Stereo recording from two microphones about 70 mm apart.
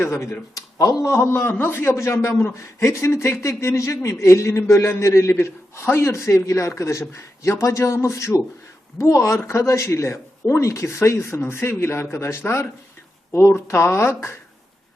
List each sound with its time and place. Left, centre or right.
0.0 s a man's voice: left
0.5 s a man's voice: left